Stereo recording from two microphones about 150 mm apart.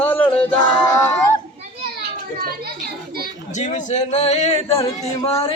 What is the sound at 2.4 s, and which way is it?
Speech, 90° right.